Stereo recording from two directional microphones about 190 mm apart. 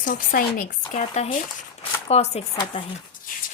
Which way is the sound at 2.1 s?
35° left (ahead or behind).